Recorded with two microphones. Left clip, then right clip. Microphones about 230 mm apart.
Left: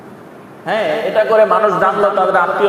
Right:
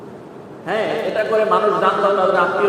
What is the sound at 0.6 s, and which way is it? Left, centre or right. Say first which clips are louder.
A man's voice: left 4 dB; left.